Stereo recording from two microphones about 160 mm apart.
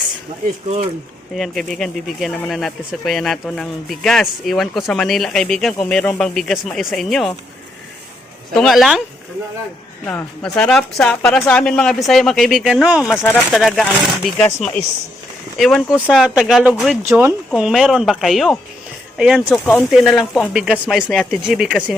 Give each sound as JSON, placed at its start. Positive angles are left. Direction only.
{"t": 1.4, "sound": "speech", "side_deg": 0}
{"t": 8.5, "sound": "speech", "side_deg": 0}
{"t": 10.1, "sound": "speech", "side_deg": 15}
{"t": 13.1, "sound": "speech", "side_deg": 15}
{"t": 13.5, "sound": "speech", "side_deg": 0}
{"t": 17.1, "sound": "speech", "side_deg": -15}
{"t": 17.5, "sound": "speech", "side_deg": 0}